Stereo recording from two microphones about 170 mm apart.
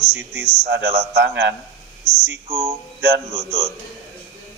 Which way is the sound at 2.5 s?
25° right (ahead or behind).